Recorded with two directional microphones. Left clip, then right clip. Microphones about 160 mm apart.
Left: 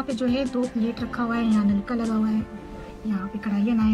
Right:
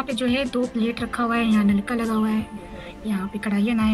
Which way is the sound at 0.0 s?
15° right (ahead or behind).